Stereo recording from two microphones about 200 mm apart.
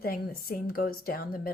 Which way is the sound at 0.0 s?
50° left (ahead or behind).